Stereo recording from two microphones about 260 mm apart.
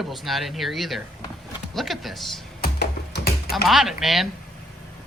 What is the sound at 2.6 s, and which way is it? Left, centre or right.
Music, left.